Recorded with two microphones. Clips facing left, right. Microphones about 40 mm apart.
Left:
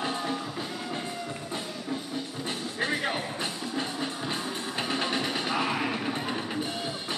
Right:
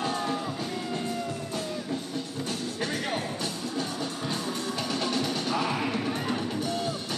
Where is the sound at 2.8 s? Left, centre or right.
Left.